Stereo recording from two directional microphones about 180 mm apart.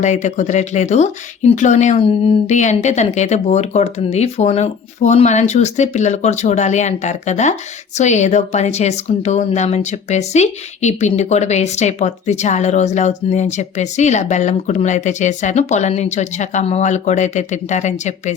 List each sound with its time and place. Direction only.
0.0 s speech: 40° left (ahead or behind)